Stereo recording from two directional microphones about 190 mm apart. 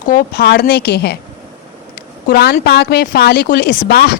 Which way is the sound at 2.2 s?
55° left (ahead or behind).